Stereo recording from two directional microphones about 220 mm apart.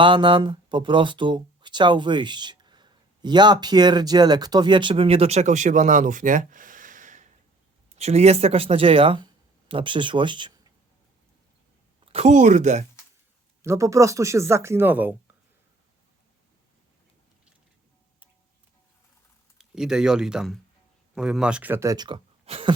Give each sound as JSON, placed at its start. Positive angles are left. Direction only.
{"t": 0.0, "sound": "speech", "side_deg": -20}
{"t": 12.1, "sound": "speech", "side_deg": -30}
{"t": 13.6, "sound": "speech", "side_deg": -15}
{"t": 19.5, "sound": "speech", "side_deg": -5}